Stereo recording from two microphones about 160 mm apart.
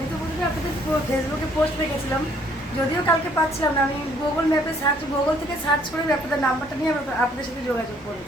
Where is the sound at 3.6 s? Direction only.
20° left (ahead or behind).